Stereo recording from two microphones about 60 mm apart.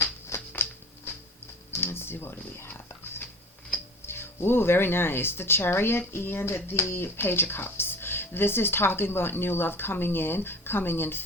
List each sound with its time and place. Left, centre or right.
0.0 s a sound: left
1.7 s music: left
4.0 s speech: left